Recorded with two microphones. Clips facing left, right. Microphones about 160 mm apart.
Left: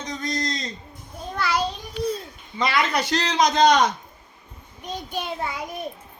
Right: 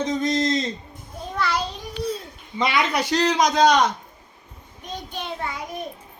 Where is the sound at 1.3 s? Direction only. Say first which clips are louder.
Right 1 dB; centre (ahead or behind).